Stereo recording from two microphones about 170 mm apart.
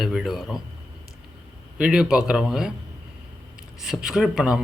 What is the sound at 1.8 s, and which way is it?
Speech, 5° right (ahead or behind).